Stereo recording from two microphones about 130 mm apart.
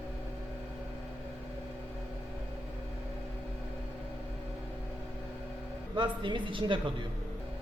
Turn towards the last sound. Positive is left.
turn(degrees=-40)  # may be behind; listen again after turning